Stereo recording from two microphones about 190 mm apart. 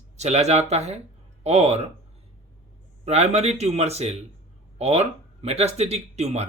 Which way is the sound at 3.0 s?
35° right (ahead or behind).